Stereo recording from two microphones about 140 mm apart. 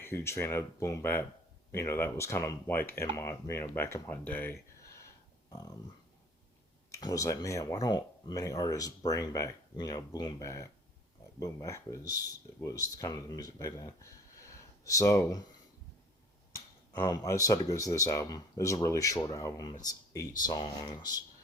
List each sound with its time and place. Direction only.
0.0 s speech: 20° left (ahead or behind)
5.5 s speech: 25° left (ahead or behind)
6.9 s speech: 25° left (ahead or behind)
16.9 s speech: 25° left (ahead or behind)